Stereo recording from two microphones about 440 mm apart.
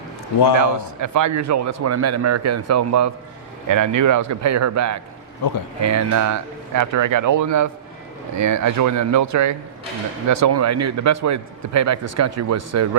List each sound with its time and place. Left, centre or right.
0.6 s a man's voice: right